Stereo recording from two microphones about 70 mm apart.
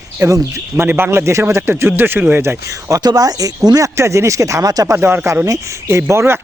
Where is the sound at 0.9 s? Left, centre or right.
Right.